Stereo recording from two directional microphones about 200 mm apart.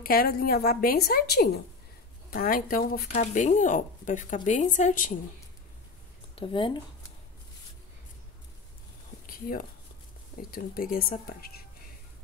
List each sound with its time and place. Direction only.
0.0 s a woman's voice: 45° left (ahead or behind)
6.3 s speech: 25° left (ahead or behind)
10.5 s a woman's voice: 45° left (ahead or behind)